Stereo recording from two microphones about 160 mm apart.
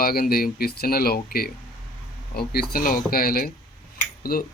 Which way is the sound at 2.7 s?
65° left (ahead or behind).